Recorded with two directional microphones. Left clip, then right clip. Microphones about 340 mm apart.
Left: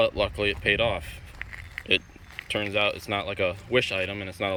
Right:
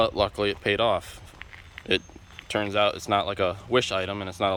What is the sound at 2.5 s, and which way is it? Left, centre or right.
Speech, centre.